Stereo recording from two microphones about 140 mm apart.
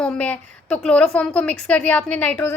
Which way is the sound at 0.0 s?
10° left (ahead or behind).